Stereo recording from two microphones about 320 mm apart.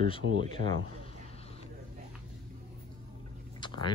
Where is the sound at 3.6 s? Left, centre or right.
Centre.